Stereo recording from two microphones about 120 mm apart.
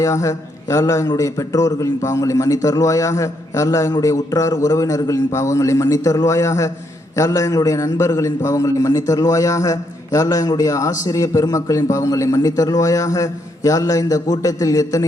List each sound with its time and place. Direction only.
0.0 s a man's voice: 25° left (ahead or behind)